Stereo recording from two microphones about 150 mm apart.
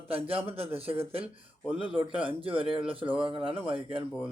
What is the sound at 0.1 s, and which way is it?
Speech, 40° right (ahead or behind).